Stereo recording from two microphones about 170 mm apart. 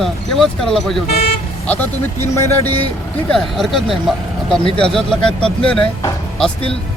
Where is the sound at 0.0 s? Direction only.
Centre (ahead or behind).